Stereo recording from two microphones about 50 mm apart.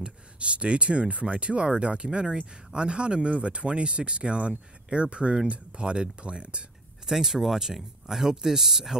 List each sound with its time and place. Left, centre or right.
0.0 s speech: right
7.1 s speech: centre